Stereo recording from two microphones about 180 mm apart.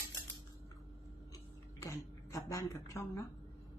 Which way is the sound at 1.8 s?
15° left (ahead or behind).